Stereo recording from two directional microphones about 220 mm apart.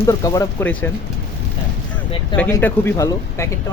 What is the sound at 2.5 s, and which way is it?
Speech, 10° left (ahead or behind).